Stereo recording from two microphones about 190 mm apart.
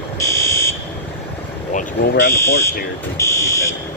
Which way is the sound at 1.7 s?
45° left (ahead or behind).